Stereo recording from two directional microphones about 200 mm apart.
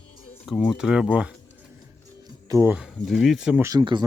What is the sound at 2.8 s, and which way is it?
Speech, centre (ahead or behind).